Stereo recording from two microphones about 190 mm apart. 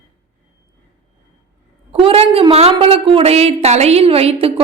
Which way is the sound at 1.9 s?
30° right (ahead or behind).